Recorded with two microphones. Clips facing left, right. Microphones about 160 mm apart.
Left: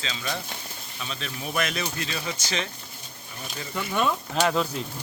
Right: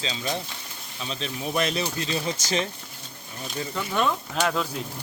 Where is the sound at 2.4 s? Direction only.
45° right (ahead or behind).